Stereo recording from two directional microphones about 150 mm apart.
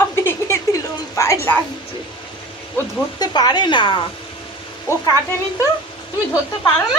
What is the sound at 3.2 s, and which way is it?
Speech, 25° left (ahead or behind).